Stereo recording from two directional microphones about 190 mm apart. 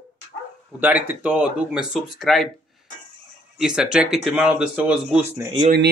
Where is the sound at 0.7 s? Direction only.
10° right (ahead or behind).